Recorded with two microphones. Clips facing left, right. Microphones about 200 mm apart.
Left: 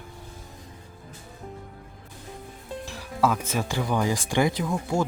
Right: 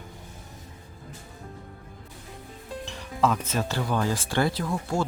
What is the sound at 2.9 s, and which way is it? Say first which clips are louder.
Speech: even; 5° left (ahead or behind).